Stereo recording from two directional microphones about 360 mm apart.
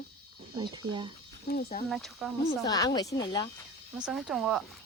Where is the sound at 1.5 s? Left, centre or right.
Left.